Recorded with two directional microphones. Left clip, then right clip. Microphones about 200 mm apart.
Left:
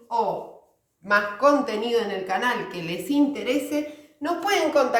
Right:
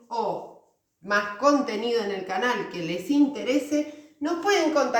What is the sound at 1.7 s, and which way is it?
A woman's voice, 20° left (ahead or behind).